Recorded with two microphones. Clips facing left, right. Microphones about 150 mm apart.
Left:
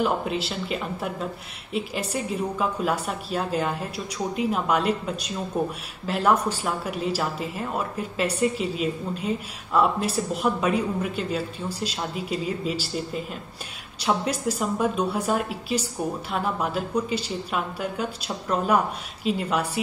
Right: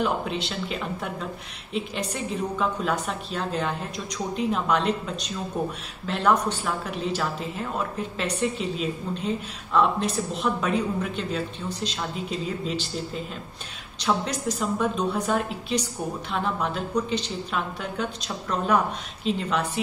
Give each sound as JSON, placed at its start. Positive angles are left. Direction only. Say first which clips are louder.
{"t": 0.0, "sound": "a woman's voice", "louder": "left 2 dB", "side_deg": 5}